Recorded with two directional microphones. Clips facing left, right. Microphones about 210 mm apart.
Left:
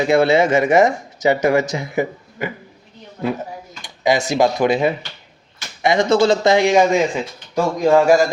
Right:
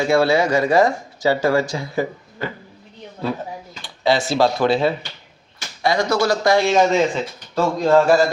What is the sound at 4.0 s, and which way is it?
Speech, 15° left (ahead or behind).